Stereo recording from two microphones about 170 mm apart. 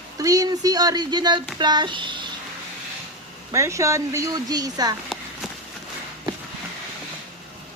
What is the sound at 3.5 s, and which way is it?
Speech, 15° right (ahead or behind).